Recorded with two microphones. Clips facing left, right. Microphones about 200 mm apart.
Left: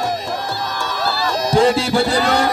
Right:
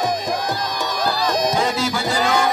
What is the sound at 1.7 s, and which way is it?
Music, 30° left (ahead or behind).